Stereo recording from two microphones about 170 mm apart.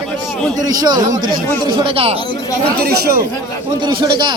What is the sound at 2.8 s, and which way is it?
Speech, 65° right (ahead or behind).